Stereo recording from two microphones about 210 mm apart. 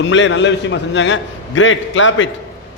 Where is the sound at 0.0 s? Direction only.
65° left (ahead or behind).